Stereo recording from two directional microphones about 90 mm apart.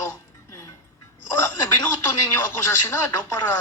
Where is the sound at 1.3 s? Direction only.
35° left (ahead or behind).